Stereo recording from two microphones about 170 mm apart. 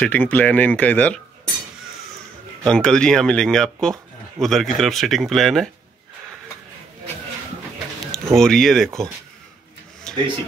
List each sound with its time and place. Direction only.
0.0 s speech: 10° left (ahead or behind)
2.6 s speech: 5° left (ahead or behind)
8.4 s speech: centre (ahead or behind)
10.1 s a sound: 5° left (ahead or behind)